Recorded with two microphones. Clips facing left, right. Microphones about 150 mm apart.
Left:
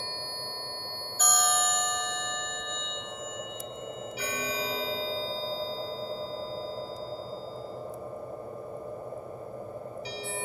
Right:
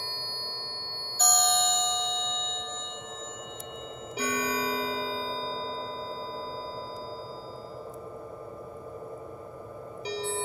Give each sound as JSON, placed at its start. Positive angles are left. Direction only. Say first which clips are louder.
{"t": 1.1, "sound": "music", "louder": "right 2 dB", "side_deg": -30}
{"t": 4.2, "sound": "music", "louder": "right 5 dB", "side_deg": -60}